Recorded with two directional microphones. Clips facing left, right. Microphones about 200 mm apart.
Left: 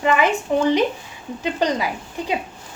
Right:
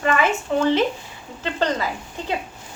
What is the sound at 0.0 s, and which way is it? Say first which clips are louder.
A woman's voice: left 2 dB; 15° left (ahead or behind).